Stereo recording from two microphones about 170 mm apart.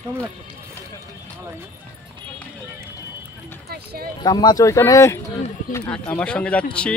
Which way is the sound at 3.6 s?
65° right (ahead or behind).